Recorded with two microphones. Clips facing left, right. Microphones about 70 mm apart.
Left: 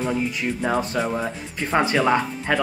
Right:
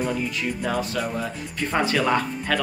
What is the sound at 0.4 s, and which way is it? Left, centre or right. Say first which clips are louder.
Speech: left 3 dB; left.